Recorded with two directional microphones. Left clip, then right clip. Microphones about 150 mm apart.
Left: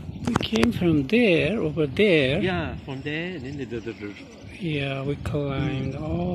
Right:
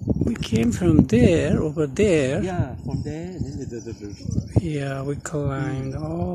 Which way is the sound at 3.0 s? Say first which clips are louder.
Left 7 dB; 45° right (ahead or behind).